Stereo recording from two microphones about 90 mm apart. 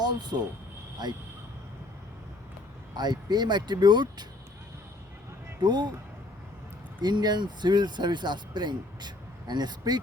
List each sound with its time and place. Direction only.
0.0 s speech: 50° right (ahead or behind)
2.9 s speech: 50° right (ahead or behind)
5.6 s speech: 55° right (ahead or behind)
7.0 s speech: 50° right (ahead or behind)